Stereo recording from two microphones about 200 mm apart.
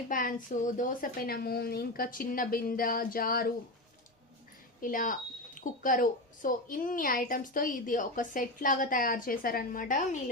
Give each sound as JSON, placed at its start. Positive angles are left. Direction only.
{"t": 0.1, "sound": "a woman's voice", "side_deg": 45}
{"t": 4.8, "sound": "a woman's voice", "side_deg": 45}